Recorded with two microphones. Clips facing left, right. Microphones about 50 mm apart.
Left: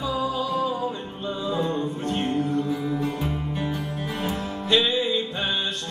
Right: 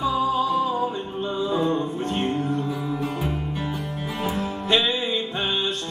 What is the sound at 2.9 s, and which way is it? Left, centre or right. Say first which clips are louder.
Music: even; centre.